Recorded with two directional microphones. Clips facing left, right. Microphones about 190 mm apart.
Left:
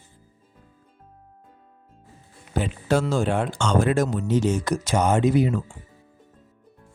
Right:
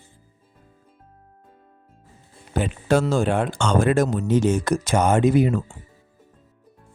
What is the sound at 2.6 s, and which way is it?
Speech, 55° right (ahead or behind).